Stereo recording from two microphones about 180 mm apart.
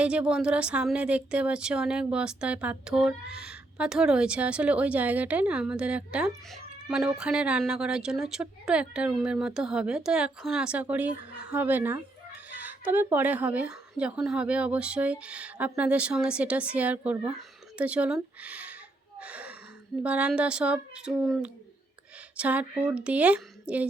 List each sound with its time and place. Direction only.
0.0 s speech: 5° right (ahead or behind)
19.2 s gasp: 5° right (ahead or behind)
20.0 s speech: 5° right (ahead or behind)